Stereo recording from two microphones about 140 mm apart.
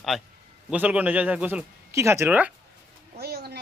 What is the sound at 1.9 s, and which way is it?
Speech, 20° right (ahead or behind).